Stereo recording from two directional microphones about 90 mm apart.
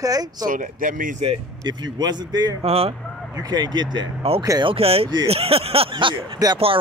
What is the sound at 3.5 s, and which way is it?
Speech, 55° right (ahead or behind).